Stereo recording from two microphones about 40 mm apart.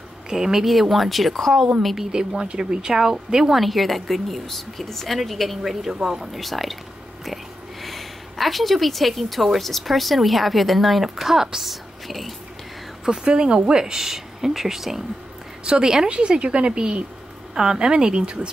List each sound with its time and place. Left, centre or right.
0.3 s a woman's voice: centre
2.0 s speech: centre
3.6 s a woman's voice: centre
7.8 s a woman's voice: centre
13.0 s speech: right
15.6 s a woman's voice: centre